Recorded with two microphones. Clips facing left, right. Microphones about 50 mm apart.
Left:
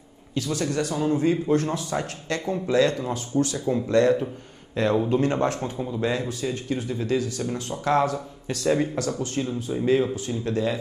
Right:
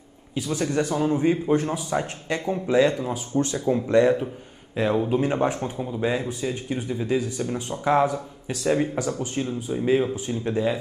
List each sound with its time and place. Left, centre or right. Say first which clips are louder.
0.3 s speech: right 1 dB; centre
3.3 s speech: even; right
3.6 s speech: right 2 dB; centre
9.5 s speech: even; centre
10.1 s speech: right 1 dB; centre